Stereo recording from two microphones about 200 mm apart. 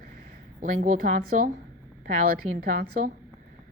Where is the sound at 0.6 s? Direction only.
40° right (ahead or behind).